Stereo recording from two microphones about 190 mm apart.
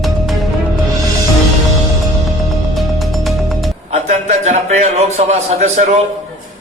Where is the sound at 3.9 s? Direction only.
40° right (ahead or behind).